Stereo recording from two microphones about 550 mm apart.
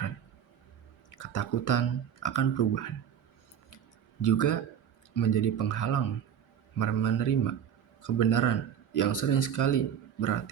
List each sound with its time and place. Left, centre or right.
1.1 s speech: left
4.2 s speech: left